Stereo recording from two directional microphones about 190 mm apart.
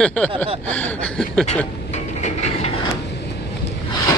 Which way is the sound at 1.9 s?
35° left (ahead or behind).